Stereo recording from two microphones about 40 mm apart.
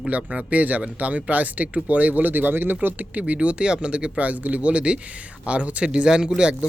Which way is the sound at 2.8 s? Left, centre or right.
Right.